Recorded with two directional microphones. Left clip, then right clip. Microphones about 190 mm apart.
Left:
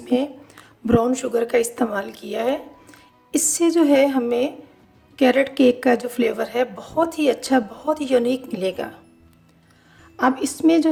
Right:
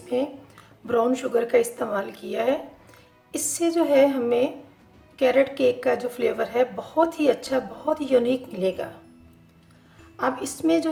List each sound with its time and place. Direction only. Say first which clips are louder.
0.1 s a woman's voice: left 4 dB; 50° left (ahead or behind)
10.2 s a woman's voice: left 6 dB; 45° left (ahead or behind)